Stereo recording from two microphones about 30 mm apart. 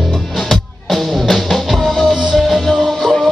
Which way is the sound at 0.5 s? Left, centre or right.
Centre.